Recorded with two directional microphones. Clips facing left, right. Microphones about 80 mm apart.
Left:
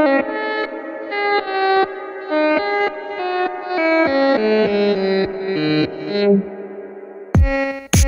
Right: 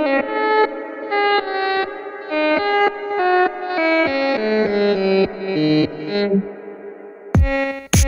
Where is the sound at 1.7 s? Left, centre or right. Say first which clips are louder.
Left 5 dB; left.